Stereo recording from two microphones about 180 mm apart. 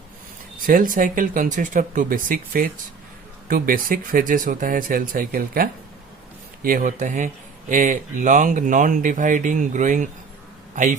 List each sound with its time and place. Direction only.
0.7 s speech: 50° right (ahead or behind)